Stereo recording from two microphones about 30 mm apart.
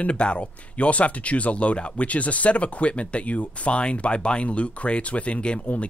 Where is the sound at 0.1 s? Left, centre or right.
Left.